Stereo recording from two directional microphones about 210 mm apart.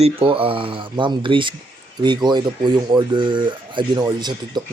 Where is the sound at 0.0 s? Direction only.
25° right (ahead or behind).